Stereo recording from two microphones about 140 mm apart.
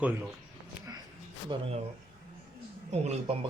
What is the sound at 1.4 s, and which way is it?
Speech, 40° right (ahead or behind).